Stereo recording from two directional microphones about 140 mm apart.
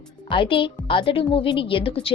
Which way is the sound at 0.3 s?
35° left (ahead or behind).